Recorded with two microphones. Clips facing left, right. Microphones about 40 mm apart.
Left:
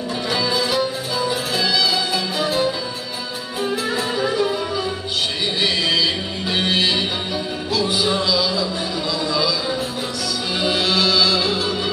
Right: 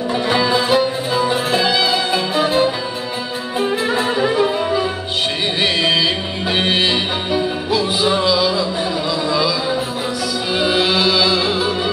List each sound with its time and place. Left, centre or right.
0.3 s music: right